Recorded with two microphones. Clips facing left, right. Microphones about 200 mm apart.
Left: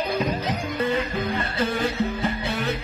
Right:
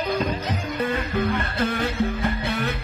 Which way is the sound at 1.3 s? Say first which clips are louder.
Right 1 dB; 60° right (ahead or behind).